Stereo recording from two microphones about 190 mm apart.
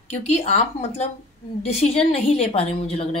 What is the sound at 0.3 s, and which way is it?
Speech, 35° left (ahead or behind).